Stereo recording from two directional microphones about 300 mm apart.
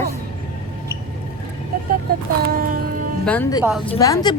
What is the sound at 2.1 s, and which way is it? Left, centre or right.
Speech, right.